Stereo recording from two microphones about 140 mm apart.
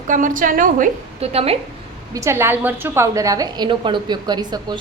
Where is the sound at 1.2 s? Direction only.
45° right (ahead or behind).